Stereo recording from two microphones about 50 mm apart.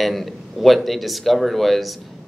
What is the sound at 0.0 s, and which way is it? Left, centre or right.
Speech, centre.